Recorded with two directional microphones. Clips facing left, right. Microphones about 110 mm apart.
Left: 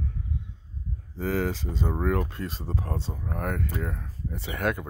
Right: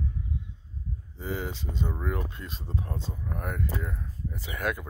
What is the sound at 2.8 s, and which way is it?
Speech, 75° left (ahead or behind).